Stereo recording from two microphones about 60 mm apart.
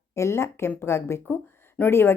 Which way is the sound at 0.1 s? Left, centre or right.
Left.